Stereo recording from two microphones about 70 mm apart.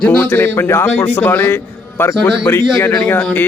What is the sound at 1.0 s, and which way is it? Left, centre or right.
Speech, left.